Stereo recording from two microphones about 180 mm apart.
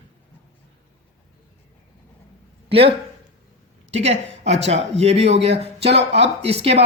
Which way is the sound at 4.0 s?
35° right (ahead or behind).